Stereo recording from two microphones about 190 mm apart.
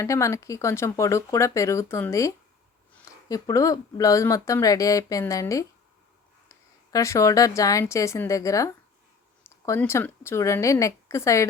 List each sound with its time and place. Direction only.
0.0 s speech: 15° left (ahead or behind)
6.9 s speech: 15° left (ahead or behind)